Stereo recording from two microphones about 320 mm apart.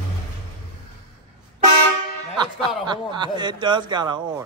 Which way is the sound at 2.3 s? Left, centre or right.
Centre.